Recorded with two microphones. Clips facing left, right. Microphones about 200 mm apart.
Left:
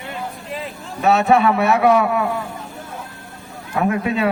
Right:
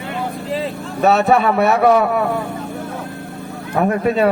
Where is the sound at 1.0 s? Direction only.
40° right (ahead or behind).